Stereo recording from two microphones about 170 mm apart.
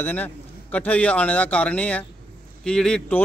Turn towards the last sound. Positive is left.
turn(degrees=5)  # may be behind; listen again after turning